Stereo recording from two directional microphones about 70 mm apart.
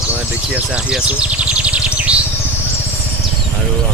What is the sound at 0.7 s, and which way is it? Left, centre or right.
Speech, centre.